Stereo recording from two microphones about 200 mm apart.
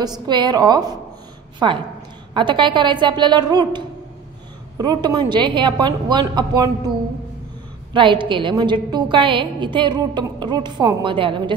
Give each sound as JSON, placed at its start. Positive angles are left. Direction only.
{"t": 0.0, "sound": "a woman's voice", "side_deg": -20}
{"t": 7.9, "sound": "a woman's voice", "side_deg": -25}